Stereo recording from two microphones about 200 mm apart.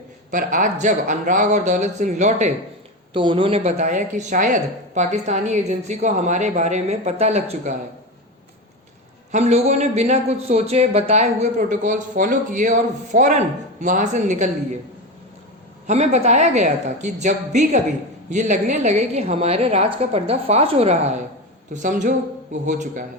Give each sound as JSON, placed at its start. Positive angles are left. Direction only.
{"t": 0.3, "sound": "a man's voice", "side_deg": -40}
{"t": 3.1, "sound": "a man's voice", "side_deg": -25}
{"t": 9.3, "sound": "a man's voice", "side_deg": -30}
{"t": 15.9, "sound": "a man's voice", "side_deg": -35}